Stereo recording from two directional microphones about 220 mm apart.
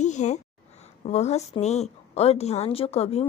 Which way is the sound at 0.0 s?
30° left (ahead or behind).